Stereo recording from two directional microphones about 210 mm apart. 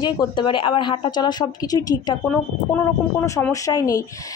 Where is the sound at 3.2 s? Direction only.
15° left (ahead or behind).